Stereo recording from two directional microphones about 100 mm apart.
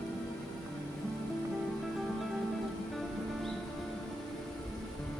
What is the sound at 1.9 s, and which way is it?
Music, centre (ahead or behind).